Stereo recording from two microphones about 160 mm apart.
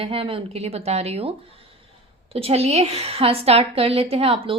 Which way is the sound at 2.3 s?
40° right (ahead or behind).